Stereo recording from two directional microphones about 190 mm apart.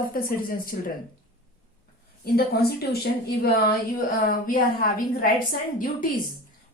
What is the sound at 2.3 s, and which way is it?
A woman's voice, 55° left (ahead or behind).